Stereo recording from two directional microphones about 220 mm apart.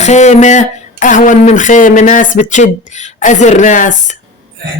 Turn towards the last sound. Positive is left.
turn(degrees=35)  # may be behind; listen again after turning